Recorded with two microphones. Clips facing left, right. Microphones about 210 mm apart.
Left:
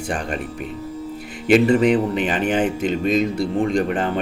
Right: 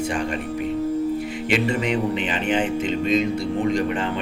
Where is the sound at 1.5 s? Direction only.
40° left (ahead or behind).